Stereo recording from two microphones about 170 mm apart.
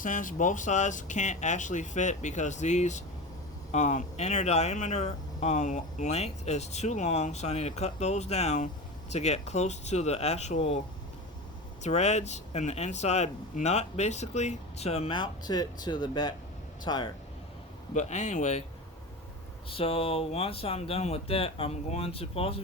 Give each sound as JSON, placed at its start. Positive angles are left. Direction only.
{"t": 0.0, "sound": "a man's voice", "side_deg": 50}
{"t": 17.9, "sound": "speech", "side_deg": 45}
{"t": 19.7, "sound": "speech", "side_deg": 35}